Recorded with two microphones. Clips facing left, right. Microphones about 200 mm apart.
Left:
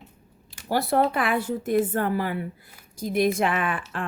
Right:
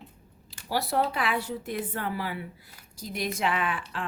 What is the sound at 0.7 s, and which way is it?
Speech, 50° left (ahead or behind).